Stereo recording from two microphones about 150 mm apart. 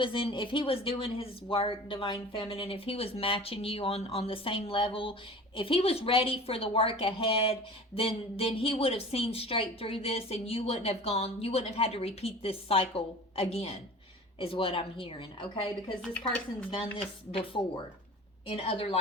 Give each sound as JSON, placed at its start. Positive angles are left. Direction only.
{"t": 0.0, "sound": "speech", "side_deg": 35}